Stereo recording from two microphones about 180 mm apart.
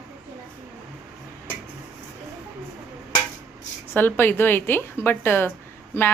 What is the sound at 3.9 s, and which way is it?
A woman's voice, 10° left (ahead or behind).